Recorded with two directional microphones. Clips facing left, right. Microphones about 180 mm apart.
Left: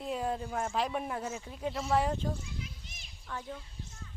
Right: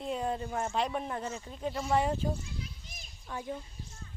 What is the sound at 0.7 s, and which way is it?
A man's voice, 5° left (ahead or behind).